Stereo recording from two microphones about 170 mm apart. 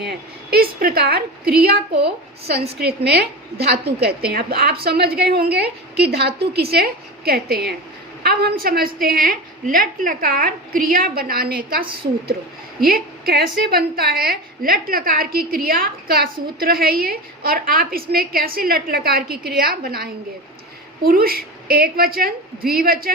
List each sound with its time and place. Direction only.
0.1 s a woman's voice: 65° right (ahead or behind)
21.1 s a woman's voice: 60° right (ahead or behind)